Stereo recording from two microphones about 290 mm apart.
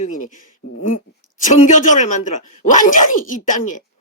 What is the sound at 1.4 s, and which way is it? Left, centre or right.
Speech, left.